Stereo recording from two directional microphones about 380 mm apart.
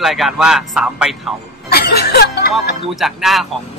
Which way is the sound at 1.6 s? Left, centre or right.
Left.